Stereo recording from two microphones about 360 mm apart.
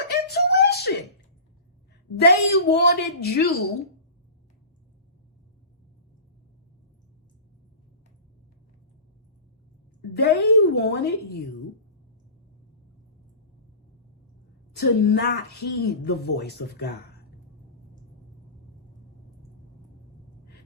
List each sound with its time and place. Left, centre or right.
0.3 s a sound: left
2.1 s a woman's voice: left
10.2 s a woman's voice: left
14.8 s a woman's voice: left